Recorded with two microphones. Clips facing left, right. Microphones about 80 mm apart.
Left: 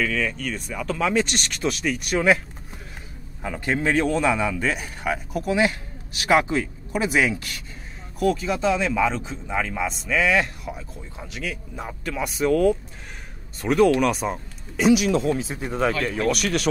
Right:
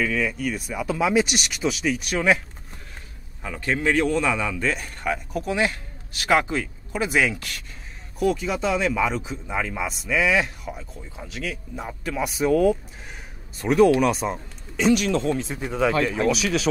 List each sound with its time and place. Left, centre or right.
0.0 s speech: centre
3.4 s speech: centre
4.0 s speech: centre
8.2 s speech: centre